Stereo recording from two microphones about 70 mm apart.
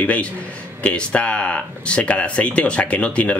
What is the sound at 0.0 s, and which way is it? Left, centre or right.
Speech, left.